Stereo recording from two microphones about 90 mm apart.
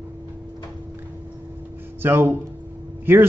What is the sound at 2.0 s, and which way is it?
Speech, 25° right (ahead or behind).